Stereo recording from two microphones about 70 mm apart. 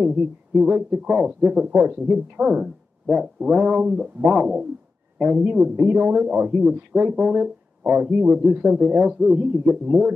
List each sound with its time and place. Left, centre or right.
0.0 s speech: centre
2.4 s speech: centre; by 7.2 s right
7.2 s speech: centre